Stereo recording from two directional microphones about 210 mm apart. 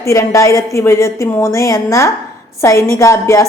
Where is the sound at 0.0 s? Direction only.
15° left (ahead or behind).